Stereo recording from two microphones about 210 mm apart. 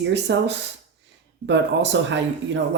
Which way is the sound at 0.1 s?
55° right (ahead or behind).